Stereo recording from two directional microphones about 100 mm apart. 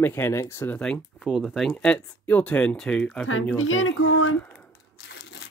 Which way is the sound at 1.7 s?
15° left (ahead or behind).